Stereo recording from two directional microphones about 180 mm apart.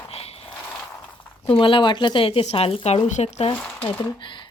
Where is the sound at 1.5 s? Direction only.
30° left (ahead or behind).